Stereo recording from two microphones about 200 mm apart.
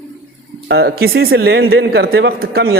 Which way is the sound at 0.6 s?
55° right (ahead or behind).